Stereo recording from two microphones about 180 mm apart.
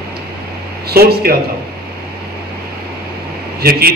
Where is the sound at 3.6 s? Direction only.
60° right (ahead or behind).